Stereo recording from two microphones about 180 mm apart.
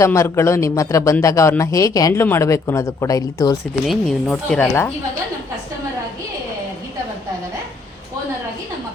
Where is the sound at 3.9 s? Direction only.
Centre (ahead or behind).